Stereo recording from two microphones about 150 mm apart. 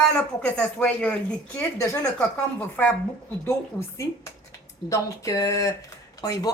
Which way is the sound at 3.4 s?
20° left (ahead or behind).